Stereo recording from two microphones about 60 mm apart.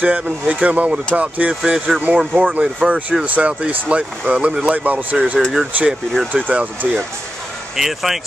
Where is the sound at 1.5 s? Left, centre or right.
Centre.